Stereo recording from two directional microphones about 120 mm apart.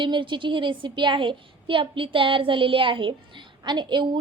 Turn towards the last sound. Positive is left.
turn(degrees=-40)  # may be behind; listen again after turning